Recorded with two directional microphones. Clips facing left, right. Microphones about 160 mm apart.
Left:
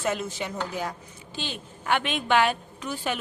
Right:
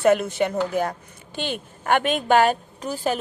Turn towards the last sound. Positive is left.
turn(degrees=-40)  # may be behind; listen again after turning